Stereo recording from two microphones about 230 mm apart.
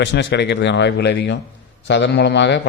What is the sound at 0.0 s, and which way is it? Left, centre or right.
A man's voice, left.